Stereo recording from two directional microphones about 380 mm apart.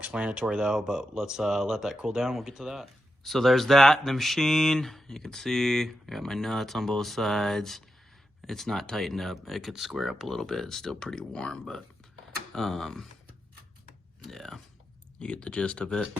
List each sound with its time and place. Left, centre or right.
0.0 s speech: centre
14.3 s speech: centre